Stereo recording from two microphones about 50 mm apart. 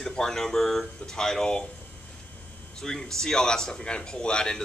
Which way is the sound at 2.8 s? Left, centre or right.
Centre.